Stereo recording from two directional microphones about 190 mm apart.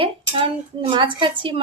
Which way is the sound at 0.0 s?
30° right (ahead or behind).